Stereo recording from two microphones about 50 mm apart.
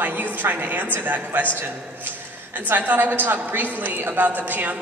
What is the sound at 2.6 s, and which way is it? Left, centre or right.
A woman's voice, right.